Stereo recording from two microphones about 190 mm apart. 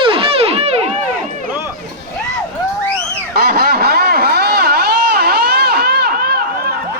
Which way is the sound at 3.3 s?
55° right (ahead or behind).